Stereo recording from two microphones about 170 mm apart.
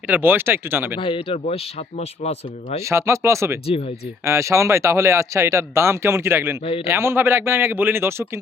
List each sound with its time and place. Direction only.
0.1 s speech: 10° right (ahead or behind)
0.9 s speech: 30° left (ahead or behind)
2.8 s speech: 15° right (ahead or behind)
3.7 s speech: 35° left (ahead or behind)
4.2 s speech: 15° right (ahead or behind)